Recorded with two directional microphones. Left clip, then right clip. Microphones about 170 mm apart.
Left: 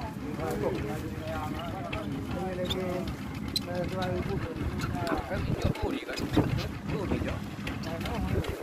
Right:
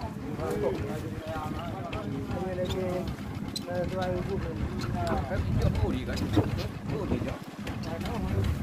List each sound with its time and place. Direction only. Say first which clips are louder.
6.4 s speech: even; 30° left (ahead or behind)